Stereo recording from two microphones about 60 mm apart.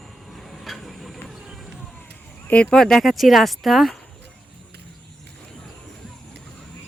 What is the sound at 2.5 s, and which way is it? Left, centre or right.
Female singing, centre.